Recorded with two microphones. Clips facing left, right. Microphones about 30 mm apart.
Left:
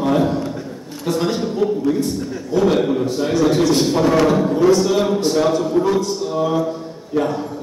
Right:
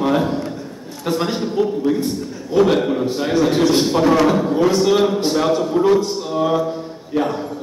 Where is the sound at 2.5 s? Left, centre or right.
Right.